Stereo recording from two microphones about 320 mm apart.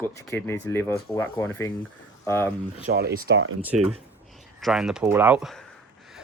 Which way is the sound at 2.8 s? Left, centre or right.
Right.